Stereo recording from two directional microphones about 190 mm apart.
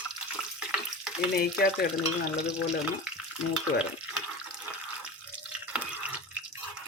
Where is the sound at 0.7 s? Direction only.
5° right (ahead or behind).